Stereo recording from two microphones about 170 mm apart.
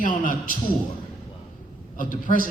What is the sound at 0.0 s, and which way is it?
Speech, 55° left (ahead or behind).